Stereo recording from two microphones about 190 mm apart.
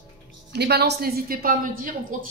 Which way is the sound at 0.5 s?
60° right (ahead or behind).